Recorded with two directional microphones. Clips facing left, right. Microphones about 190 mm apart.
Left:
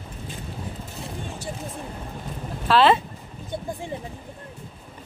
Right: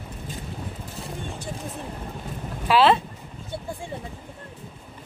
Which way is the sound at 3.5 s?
20° left (ahead or behind).